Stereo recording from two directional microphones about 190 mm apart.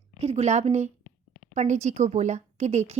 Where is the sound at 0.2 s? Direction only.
35° right (ahead or behind).